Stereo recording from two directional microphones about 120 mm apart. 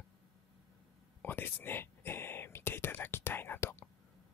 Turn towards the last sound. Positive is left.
turn(degrees=20)  # may be behind; listen again after turning